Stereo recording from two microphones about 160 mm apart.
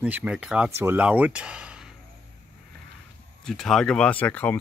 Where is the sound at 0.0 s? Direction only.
10° right (ahead or behind).